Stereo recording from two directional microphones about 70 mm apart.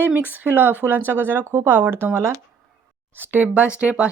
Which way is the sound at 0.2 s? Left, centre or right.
Right.